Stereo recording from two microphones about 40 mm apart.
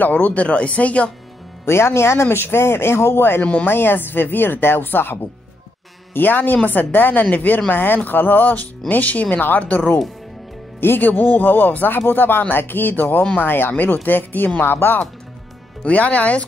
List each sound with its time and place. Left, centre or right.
0.0 s speech: left
1.7 s a woman's voice: left
7.7 s a woman's voice: left
10.8 s speech: left
11.1 s a woman's voice: left
14.6 s speech: left
15.8 s speech: left